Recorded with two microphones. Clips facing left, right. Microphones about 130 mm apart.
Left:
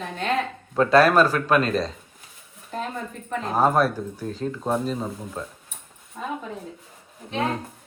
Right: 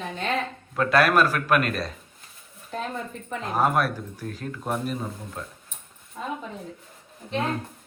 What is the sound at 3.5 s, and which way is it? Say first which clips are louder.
A man's voice: left 3 dB; 30° left (ahead or behind).